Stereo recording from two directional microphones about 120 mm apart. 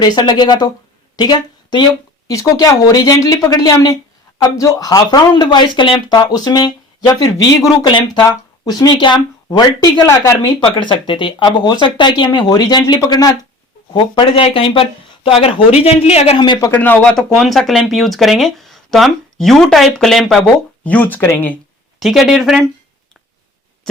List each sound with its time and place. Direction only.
0.0 s a woman's voice: 35° left (ahead or behind)
2.2 s speech: 30° left (ahead or behind)
10.4 s speech: 40° left (ahead or behind)
13.9 s speech: 45° left (ahead or behind)
16.4 s speech: 40° left (ahead or behind)
16.7 s speech: 15° left (ahead or behind)
20.4 s speech: 15° left (ahead or behind)
22.0 s speech: centre (ahead or behind)